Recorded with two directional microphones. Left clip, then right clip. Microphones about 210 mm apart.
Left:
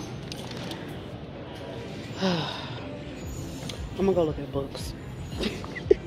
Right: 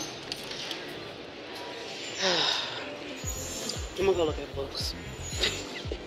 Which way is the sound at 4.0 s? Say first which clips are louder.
Left 2 dB; 5° left (ahead or behind).